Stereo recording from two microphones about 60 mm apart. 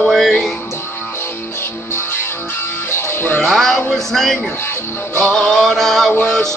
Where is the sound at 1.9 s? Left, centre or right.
Left.